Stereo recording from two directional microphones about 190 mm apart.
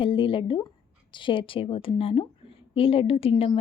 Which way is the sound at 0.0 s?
25° left (ahead or behind).